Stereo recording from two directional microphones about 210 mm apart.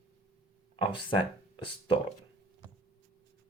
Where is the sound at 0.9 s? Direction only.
25° left (ahead or behind).